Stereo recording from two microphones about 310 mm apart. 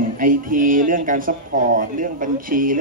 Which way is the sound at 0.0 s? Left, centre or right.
Right.